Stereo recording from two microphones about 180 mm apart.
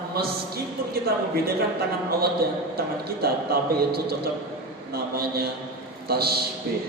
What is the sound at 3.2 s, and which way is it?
A man's voice, 60° right (ahead or behind).